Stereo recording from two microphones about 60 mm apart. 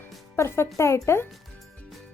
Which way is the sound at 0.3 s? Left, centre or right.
Left.